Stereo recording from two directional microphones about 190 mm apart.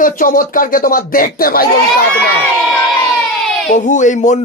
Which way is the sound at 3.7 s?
40° left (ahead or behind).